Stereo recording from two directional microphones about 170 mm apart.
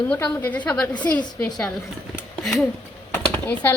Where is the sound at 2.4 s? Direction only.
Centre (ahead or behind).